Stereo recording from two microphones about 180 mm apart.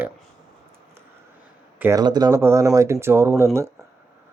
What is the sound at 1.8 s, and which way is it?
Speech, 20° right (ahead or behind).